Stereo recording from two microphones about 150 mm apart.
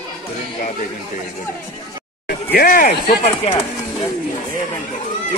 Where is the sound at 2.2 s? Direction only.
70° left (ahead or behind).